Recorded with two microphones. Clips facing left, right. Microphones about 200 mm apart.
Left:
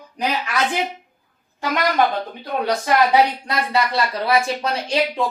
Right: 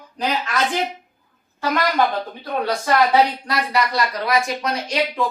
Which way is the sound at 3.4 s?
25° left (ahead or behind).